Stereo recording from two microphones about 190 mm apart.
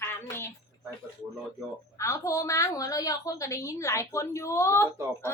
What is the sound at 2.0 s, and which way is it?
A woman's voice, 15° left (ahead or behind).